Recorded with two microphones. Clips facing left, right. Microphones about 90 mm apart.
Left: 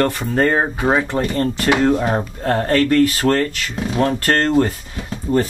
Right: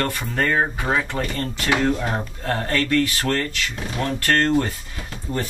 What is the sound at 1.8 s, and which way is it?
Speech, 45° left (ahead or behind).